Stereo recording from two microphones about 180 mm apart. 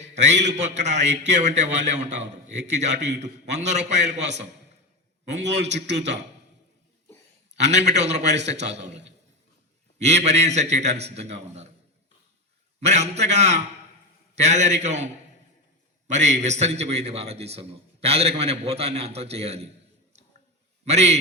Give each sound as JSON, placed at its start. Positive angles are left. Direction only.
{"t": 0.1, "sound": "a sound", "side_deg": -40}
{"t": 0.4, "sound": "a man's voice", "side_deg": -40}
{"t": 5.5, "sound": "a man's voice", "side_deg": -40}
{"t": 7.5, "sound": "a man's voice", "side_deg": -40}
{"t": 10.0, "sound": "a man's voice", "side_deg": -40}
{"t": 12.8, "sound": "a man's voice", "side_deg": -40}
{"t": 20.8, "sound": "a man's voice", "side_deg": -40}